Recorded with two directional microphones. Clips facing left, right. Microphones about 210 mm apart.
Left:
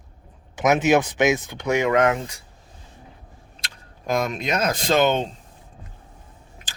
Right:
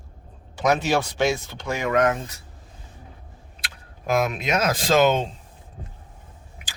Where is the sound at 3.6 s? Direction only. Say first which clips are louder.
Right 1 dB; 5° right (ahead or behind).